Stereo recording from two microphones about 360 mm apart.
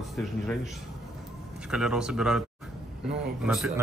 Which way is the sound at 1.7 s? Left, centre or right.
Centre.